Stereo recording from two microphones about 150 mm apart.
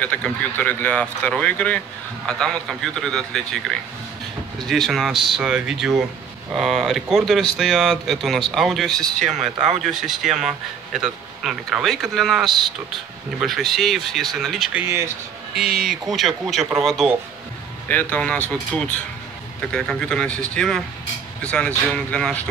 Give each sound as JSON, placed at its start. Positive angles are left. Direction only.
{"t": 0.0, "sound": "speech", "side_deg": 10}
{"t": 17.8, "sound": "speech", "side_deg": 10}
{"t": 19.7, "sound": "speech", "side_deg": 5}